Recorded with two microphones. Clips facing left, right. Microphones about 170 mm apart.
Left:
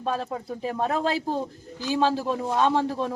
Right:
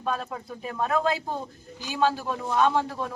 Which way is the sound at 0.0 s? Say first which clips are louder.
Left 2 dB; 30° left (ahead or behind).